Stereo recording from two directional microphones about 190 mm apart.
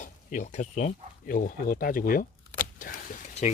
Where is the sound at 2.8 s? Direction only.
40° left (ahead or behind).